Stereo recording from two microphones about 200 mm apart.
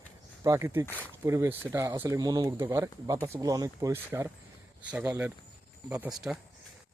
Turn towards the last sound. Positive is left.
turn(degrees=-5)  # may be behind; listen again after turning